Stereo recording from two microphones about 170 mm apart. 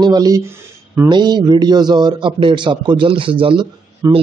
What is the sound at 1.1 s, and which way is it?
A man's voice, 25° right (ahead or behind).